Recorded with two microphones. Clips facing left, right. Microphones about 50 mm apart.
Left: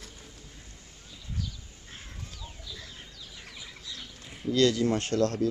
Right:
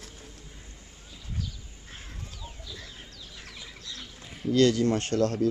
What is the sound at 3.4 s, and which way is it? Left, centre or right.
Bird, centre.